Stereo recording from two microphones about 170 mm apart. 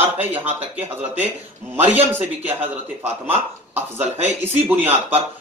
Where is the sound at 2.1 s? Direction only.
10° right (ahead or behind).